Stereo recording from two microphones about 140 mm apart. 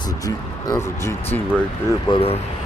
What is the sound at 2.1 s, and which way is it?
Speech, 45° left (ahead or behind).